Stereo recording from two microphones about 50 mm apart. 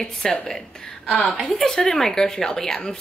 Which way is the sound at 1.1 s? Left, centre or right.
Left.